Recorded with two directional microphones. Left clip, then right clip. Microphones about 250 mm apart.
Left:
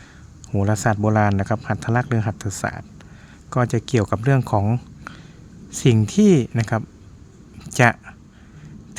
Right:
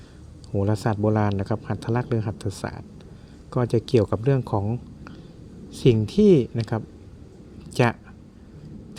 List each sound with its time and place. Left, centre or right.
0.5 s speech: centre